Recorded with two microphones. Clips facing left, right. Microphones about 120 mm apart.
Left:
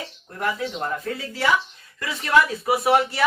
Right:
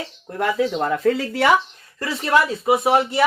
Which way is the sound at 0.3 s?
85° right.